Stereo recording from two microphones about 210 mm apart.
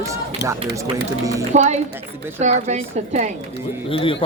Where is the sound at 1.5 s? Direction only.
35° right (ahead or behind).